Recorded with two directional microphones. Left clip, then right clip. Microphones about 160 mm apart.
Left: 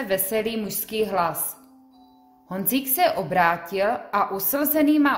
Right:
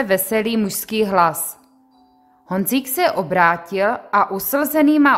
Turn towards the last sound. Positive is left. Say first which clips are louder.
# right 5 dB
turn(degrees=-40)  # may be behind; listen again after turning